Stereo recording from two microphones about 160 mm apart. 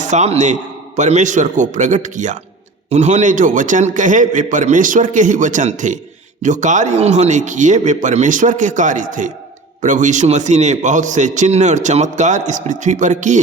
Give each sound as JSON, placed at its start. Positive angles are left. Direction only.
{"t": 0.0, "sound": "a man's voice", "side_deg": -45}